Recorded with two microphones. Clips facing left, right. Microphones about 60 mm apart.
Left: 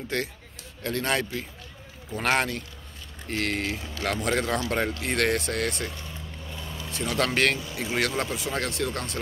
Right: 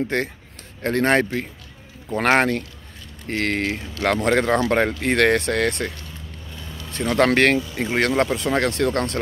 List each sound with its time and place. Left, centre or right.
0.1 s speech: right